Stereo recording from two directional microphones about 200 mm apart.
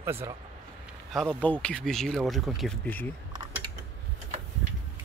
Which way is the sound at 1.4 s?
5° left (ahead or behind).